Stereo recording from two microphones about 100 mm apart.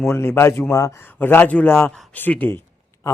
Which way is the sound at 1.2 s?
20° left (ahead or behind).